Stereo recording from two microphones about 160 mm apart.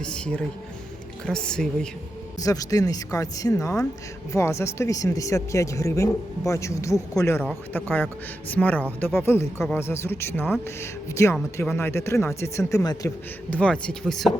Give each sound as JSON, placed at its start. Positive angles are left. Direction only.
{"t": 0.0, "sound": "a woman's voice", "side_deg": 5}
{"t": 2.4, "sound": "speech", "side_deg": 20}
{"t": 13.5, "sound": "speech", "side_deg": 5}